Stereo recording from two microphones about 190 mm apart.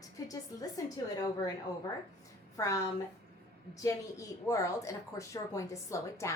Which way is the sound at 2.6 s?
20° left (ahead or behind).